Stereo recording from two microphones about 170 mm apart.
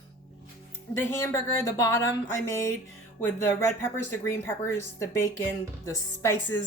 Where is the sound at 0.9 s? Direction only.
15° left (ahead or behind).